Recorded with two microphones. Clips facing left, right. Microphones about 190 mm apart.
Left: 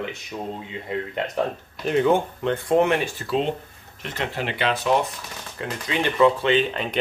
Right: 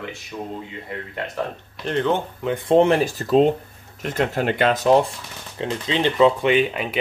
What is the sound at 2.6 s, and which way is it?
Speech, 30° right (ahead or behind).